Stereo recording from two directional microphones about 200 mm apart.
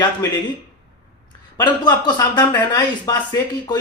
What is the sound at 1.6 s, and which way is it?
Speech, 20° left (ahead or behind).